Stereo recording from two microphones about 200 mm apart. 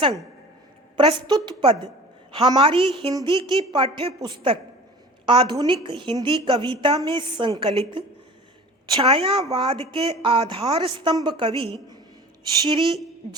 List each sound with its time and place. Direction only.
0.9 s a woman's voice: 25° right (ahead or behind)
12.8 s speech: centre (ahead or behind)